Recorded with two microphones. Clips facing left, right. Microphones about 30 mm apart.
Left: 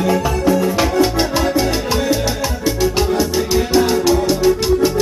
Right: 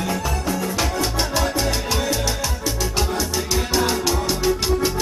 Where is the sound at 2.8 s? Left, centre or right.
Centre.